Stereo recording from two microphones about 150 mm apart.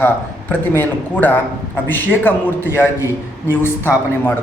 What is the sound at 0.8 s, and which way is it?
A man's voice, 10° left (ahead or behind).